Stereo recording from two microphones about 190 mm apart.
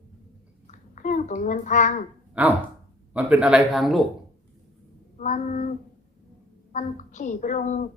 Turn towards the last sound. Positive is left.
turn(degrees=40)  # may be behind; listen again after turning